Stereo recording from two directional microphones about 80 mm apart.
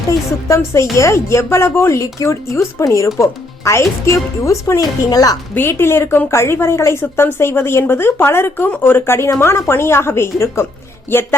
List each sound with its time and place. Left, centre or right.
0.4 s a woman's voice: left
4.8 s speech: left
5.5 s a woman's voice: left